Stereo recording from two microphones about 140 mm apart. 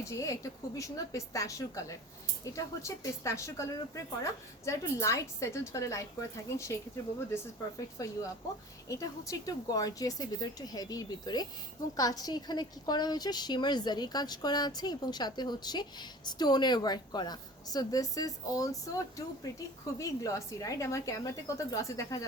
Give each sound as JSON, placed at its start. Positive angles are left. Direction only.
{"t": 0.0, "sound": "a woman's voice", "side_deg": 20}
{"t": 8.0, "sound": "a woman's voice", "side_deg": 25}